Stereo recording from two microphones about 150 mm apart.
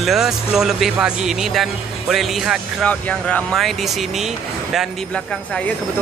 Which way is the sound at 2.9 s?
10° left (ahead or behind).